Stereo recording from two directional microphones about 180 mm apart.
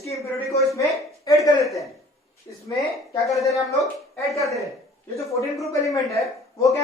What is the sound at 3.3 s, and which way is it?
Speech, 20° left (ahead or behind).